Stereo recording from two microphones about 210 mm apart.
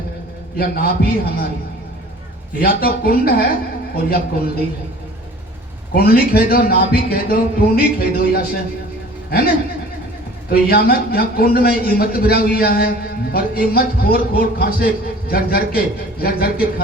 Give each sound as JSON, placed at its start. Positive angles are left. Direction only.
{"t": 0.5, "sound": "a man's voice", "side_deg": 45}
{"t": 2.6, "sound": "a man's voice", "side_deg": 45}
{"t": 5.9, "sound": "a man's voice", "side_deg": 45}
{"t": 10.5, "sound": "a man's voice", "side_deg": 45}